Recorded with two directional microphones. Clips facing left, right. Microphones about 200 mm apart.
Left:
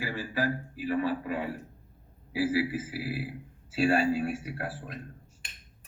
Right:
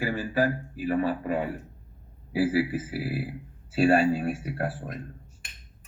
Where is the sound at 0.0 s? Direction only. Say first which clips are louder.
Right 5 dB; 45° right (ahead or behind).